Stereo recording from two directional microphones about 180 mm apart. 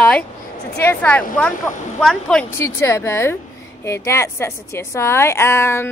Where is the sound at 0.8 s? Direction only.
5° left (ahead or behind).